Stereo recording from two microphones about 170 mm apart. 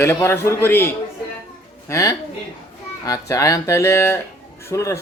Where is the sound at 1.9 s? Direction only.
20° left (ahead or behind).